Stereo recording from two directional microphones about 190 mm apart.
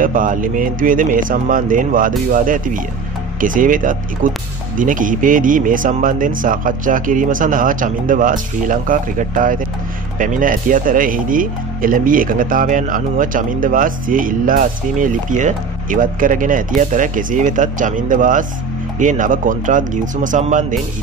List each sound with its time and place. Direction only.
0.0 s speech: 45° right (ahead or behind)